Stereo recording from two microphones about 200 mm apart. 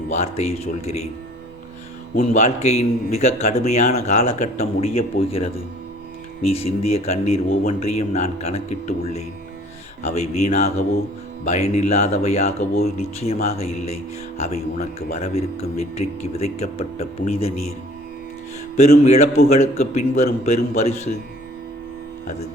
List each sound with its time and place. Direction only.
0.1 s a man's voice: 35° left (ahead or behind)
2.1 s a man's voice: 35° left (ahead or behind)
6.5 s a man's voice: 30° left (ahead or behind)
7.4 s speech: 45° left (ahead or behind)
7.7 s a man's voice: 30° left (ahead or behind)
10.0 s a man's voice: 35° left (ahead or behind)
19.0 s a man's voice: 35° left (ahead or behind)